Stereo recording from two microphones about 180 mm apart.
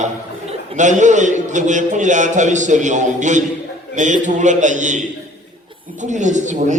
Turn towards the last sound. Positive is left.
turn(degrees=-40)  # may be behind; listen again after turning